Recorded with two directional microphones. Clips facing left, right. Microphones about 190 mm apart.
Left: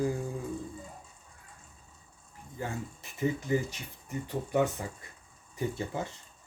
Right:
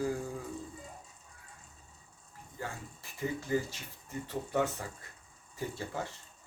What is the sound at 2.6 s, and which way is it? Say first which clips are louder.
Speech: left 5 dB; 20° left (ahead or behind).